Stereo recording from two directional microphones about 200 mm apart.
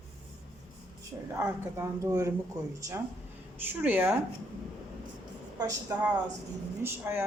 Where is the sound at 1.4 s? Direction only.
10° right (ahead or behind).